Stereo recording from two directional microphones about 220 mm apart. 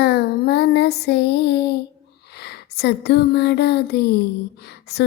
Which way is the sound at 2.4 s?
45° left (ahead or behind).